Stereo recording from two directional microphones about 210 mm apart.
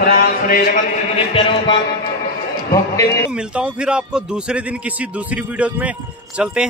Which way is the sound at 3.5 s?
5° right (ahead or behind).